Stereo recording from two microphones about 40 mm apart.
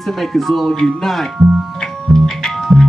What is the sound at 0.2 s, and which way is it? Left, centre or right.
Speech, centre.